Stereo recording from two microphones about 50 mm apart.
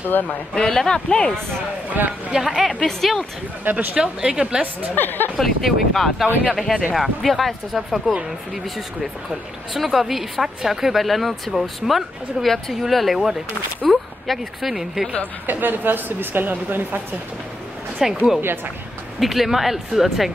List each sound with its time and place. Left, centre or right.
0.1 s speech: left
0.6 s speech: centre
1.9 s a woman's voice: right
2.3 s a woman's voice: centre
3.6 s a woman's voice: right
3.9 s speech: centre
4.9 s speech: left
5.4 s a woman's voice: centre
9.8 s a woman's voice: centre
15.4 s a woman's voice: right
18.0 s a woman's voice: centre